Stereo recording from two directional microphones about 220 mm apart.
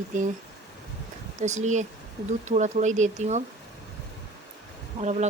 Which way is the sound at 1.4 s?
35° right (ahead or behind).